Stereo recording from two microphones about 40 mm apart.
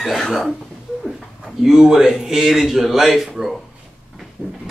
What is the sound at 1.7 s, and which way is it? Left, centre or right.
Speech, centre.